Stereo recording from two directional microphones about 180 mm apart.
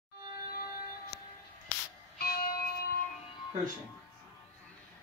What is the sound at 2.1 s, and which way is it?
Music, 55° left (ahead or behind).